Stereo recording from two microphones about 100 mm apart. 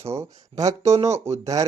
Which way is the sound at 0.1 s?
30° right (ahead or behind).